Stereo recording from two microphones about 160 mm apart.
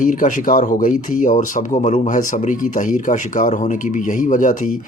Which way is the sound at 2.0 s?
55° left (ahead or behind).